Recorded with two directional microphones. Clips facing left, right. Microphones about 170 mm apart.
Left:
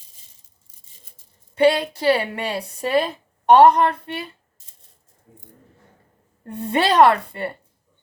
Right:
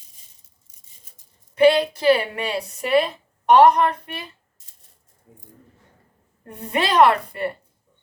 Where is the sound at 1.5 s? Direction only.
30° left (ahead or behind).